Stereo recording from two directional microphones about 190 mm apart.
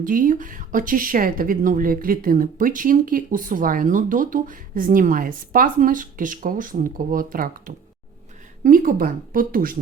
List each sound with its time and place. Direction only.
0.0 s speech: 45° right (ahead or behind)